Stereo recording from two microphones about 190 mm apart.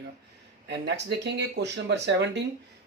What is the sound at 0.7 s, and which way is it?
Speech, 65° right (ahead or behind).